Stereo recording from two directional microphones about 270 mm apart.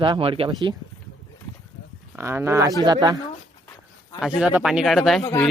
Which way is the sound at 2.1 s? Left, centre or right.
Centre.